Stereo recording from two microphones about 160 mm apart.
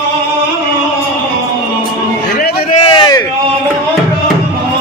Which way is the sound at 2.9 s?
25° left (ahead or behind).